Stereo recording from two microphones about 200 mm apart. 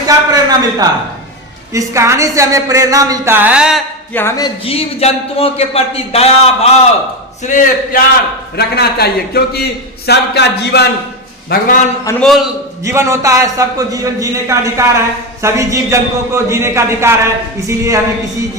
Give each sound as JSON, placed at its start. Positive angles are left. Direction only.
{"t": 0.0, "sound": "a man's voice", "side_deg": -20}
{"t": 4.1, "sound": "a man's voice", "side_deg": 10}
{"t": 8.5, "sound": "a man's voice", "side_deg": 55}
{"t": 11.4, "sound": "a man's voice", "side_deg": 40}
{"t": 12.2, "sound": "a man's voice", "side_deg": 0}
{"t": 12.8, "sound": "a man's voice", "side_deg": -15}